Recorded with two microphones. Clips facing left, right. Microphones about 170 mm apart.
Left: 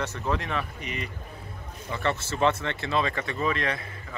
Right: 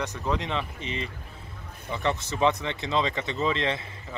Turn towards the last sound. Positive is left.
turn(degrees=-25)  # may be behind; listen again after turning